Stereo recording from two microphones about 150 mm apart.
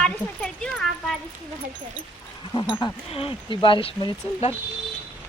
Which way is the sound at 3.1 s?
40° left (ahead or behind).